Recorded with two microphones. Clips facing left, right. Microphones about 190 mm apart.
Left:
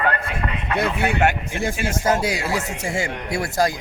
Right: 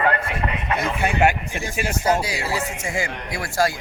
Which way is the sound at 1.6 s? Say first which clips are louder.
Left 1 dB; 50° left (ahead or behind).